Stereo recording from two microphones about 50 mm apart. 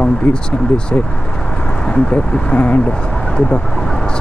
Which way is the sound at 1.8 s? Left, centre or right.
Centre.